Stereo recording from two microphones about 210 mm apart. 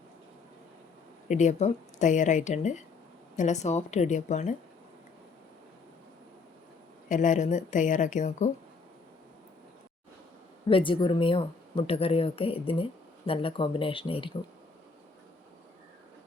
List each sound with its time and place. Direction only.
1.3 s speech: 35° left (ahead or behind)
7.1 s speech: 35° left (ahead or behind)
10.7 s speech: 25° left (ahead or behind)